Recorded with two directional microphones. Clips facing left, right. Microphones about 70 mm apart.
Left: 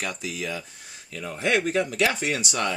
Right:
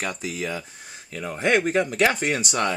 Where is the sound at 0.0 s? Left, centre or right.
Right.